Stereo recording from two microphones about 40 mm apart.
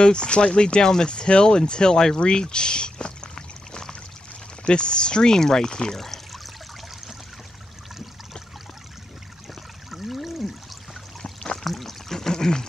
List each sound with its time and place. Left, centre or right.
0.0 s speech: left
2.1 s pour: left
4.6 s speech: left
5.9 s pour: centre
9.8 s a sound: centre
11.6 s pour: centre